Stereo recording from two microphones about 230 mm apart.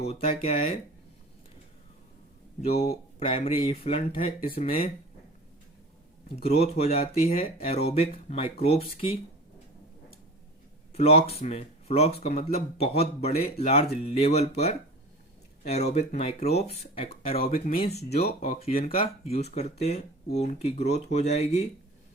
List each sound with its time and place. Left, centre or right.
0.0 s speech: left
2.6 s speech: left
6.3 s speech: left
10.9 s speech: left
17.2 s speech: left
18.2 s speech: left
18.7 s speech: left
19.0 s speech: left